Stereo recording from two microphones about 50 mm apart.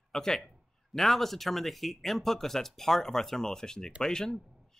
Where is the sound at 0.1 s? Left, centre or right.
Centre.